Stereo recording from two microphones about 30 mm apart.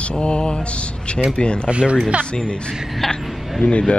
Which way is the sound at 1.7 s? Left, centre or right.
Right.